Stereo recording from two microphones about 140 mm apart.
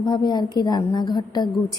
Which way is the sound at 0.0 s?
30° left (ahead or behind).